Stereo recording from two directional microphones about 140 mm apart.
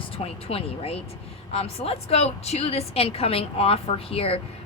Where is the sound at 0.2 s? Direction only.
45° left (ahead or behind).